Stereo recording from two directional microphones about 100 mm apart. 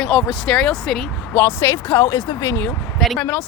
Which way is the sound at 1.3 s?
25° left (ahead or behind).